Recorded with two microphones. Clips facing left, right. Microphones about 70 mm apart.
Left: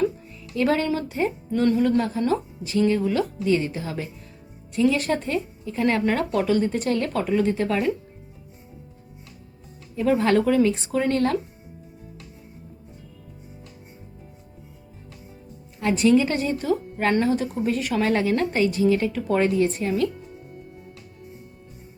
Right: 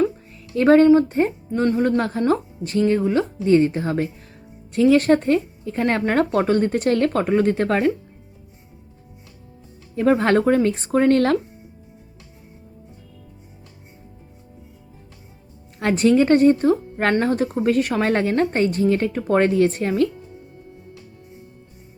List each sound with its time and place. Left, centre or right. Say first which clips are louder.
0.5 s speech: right 10 dB; right
2.0 s a woman's voice: right 3 dB; right
2.8 s speech: right 3 dB; right
4.7 s a woman's voice: right 6 dB; right
9.9 s a woman's voice: right 3 dB; right
15.8 s a woman's voice: right 2 dB; right